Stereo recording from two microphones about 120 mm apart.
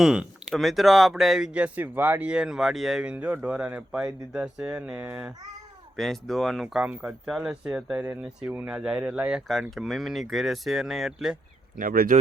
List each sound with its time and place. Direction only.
0.0 s speech: 5° right (ahead or behind)
6.0 s speech: 5° left (ahead or behind)
9.5 s speech: centre (ahead or behind)
12.1 s speech: 80° right